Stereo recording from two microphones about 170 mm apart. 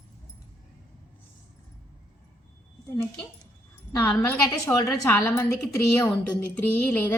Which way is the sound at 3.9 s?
15° left (ahead or behind).